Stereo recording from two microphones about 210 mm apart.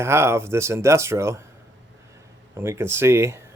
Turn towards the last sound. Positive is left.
turn(degrees=-10)  # may be behind; listen again after turning